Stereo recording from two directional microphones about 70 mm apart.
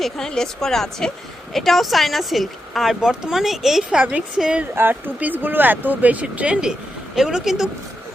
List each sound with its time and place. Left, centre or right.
0.0 s speech: centre
4.7 s speech: right; by 7.7 s centre